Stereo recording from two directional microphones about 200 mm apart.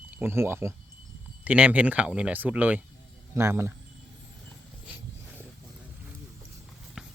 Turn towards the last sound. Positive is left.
turn(degrees=-5)  # may be behind; listen again after turning